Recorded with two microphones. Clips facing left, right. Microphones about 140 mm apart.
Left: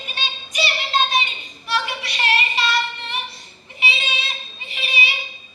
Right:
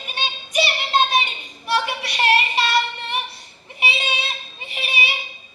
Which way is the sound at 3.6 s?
55° right (ahead or behind).